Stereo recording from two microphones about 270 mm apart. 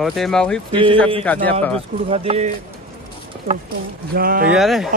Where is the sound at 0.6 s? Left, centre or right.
Centre.